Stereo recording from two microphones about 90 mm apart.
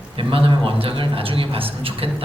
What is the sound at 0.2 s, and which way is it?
A man's voice, 85° right.